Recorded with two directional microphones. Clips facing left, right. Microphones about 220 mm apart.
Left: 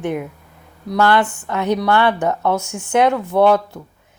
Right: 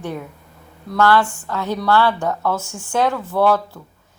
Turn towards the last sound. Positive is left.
turn(degrees=20)  # may be behind; listen again after turning